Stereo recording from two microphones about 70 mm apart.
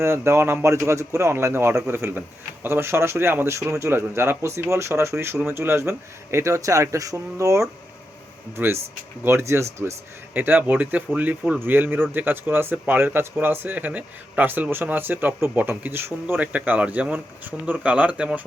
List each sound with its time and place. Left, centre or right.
0.0 s speech: right
10.3 s speech: right
16.2 s speech: right